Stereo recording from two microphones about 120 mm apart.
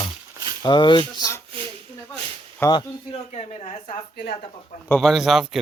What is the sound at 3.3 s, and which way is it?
Speech, 70° left (ahead or behind).